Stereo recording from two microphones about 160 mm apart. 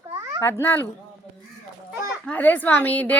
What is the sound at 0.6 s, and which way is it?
Speech, 15° left (ahead or behind).